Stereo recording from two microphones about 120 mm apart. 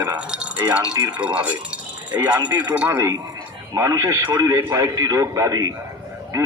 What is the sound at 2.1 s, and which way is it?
Speech, 35° right (ahead or behind).